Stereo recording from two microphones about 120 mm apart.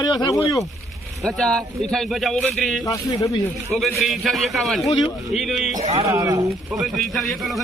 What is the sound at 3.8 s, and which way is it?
Speech, centre (ahead or behind).